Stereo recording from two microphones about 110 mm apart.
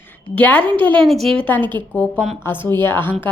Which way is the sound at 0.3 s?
15° left (ahead or behind).